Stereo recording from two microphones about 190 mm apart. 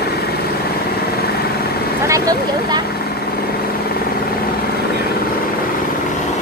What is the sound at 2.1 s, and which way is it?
Speech, 20° right (ahead or behind).